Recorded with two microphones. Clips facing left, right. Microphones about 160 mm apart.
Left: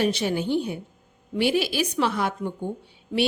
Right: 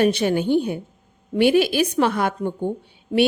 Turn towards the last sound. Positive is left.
turn(degrees=-55)  # may be behind; listen again after turning